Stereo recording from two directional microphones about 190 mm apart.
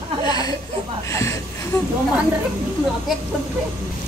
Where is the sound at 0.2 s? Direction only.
20° left (ahead or behind).